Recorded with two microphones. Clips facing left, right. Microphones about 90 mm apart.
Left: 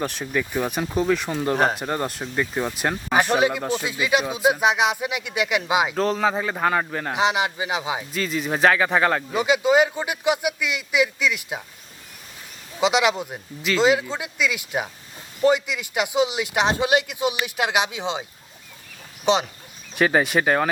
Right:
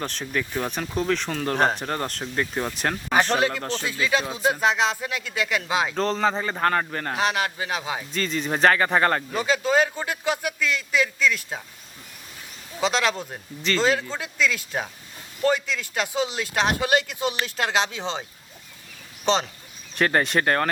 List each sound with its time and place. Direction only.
0.0 s speech: 10° left (ahead or behind)
1.5 s speech: 5° left (ahead or behind)
6.0 s a man's voice: 5° left (ahead or behind)
7.1 s speech: 15° left (ahead or behind)
8.1 s a man's voice: 5° left (ahead or behind)
9.3 s speech: 15° left (ahead or behind)
12.8 s a man's voice: 15° left (ahead or behind)